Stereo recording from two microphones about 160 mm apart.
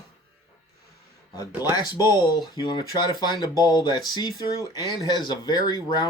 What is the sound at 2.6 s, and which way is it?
Speech, 25° left (ahead or behind).